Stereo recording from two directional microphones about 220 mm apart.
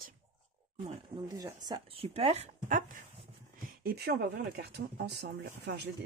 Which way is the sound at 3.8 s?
45° right (ahead or behind).